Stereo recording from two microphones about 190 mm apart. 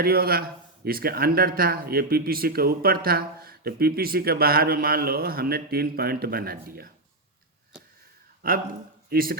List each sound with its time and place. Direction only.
0.0 s speech: 50° right (ahead or behind)
8.4 s speech: 50° right (ahead or behind)